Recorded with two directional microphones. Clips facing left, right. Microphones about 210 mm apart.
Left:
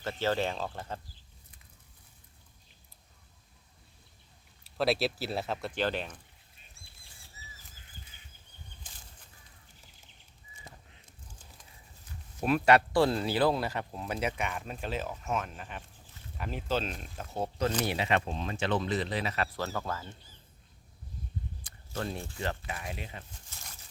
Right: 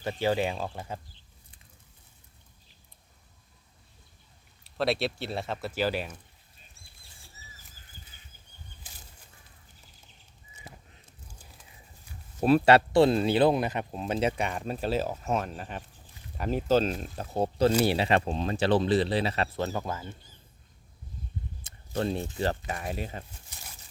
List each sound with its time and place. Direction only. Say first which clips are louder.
0.0 s speech: right 3 dB; 15° right (ahead or behind)
4.6 s speech: right 1 dB; centre (ahead or behind)
12.4 s speech: right 4 dB; 30° right (ahead or behind); by 20.1 s 15° right (ahead or behind)
21.6 s a sound: right 7 dB; 25° right (ahead or behind)
22.4 s speech: right 6 dB; 40° right (ahead or behind)
23.5 s a sound: right 2 dB; 15° right (ahead or behind)